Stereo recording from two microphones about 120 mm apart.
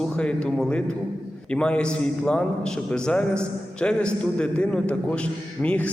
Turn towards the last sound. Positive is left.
turn(degrees=10)  # may be behind; listen again after turning